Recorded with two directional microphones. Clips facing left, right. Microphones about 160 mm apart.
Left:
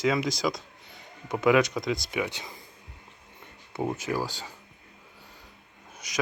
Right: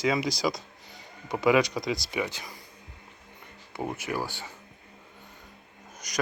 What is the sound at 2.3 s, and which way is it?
Speech, 20° left (ahead or behind).